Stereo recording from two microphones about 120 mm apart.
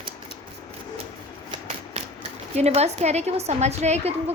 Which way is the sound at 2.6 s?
65° right (ahead or behind).